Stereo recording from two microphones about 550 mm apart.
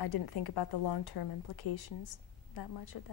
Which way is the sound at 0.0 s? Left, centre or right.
Left.